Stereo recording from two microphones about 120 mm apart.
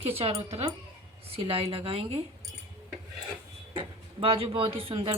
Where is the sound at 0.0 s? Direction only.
55° right (ahead or behind).